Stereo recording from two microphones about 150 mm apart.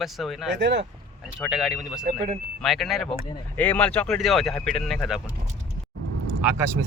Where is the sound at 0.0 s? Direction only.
Centre (ahead or behind).